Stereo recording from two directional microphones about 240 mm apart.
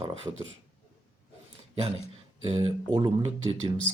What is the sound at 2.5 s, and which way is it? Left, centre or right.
Speech, right.